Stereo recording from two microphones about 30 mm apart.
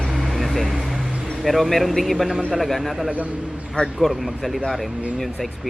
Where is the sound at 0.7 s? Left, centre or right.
Centre.